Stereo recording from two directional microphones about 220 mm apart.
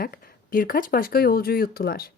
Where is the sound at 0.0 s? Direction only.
40° left (ahead or behind).